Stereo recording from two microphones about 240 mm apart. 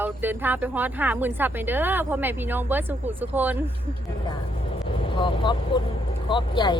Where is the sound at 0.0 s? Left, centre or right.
Centre.